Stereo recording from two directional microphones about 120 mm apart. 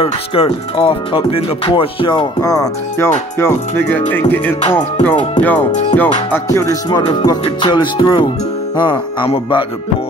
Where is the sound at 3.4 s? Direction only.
15° left (ahead or behind).